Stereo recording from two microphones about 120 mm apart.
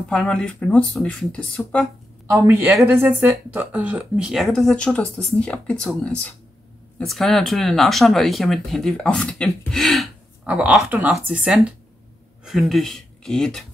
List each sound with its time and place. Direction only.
0.1 s speech: 10° left (ahead or behind)
2.2 s a man's voice: 25° right (ahead or behind); by 10.0 s centre (ahead or behind)
10.4 s speech: 10° right (ahead or behind)